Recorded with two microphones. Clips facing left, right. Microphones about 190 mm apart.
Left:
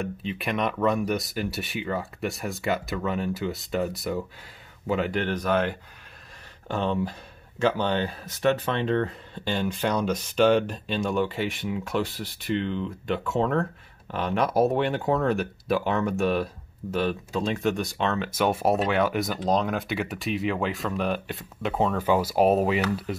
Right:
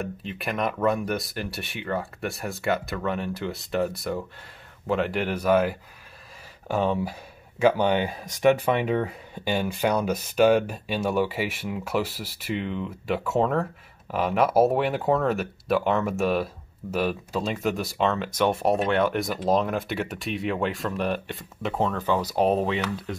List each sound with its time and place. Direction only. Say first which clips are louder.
0.0 s speech: left 1 dB; centre (ahead or behind)